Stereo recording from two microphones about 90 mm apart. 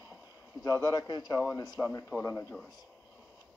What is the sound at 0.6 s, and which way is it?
Speech, 45° left (ahead or behind).